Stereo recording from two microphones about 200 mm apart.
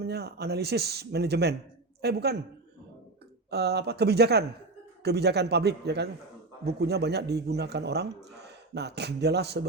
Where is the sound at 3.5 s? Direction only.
55° right (ahead or behind).